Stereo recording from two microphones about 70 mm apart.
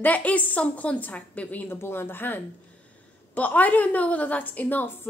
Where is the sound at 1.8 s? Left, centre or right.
Left.